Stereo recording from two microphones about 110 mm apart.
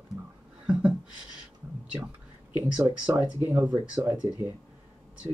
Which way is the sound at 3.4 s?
15° right (ahead or behind).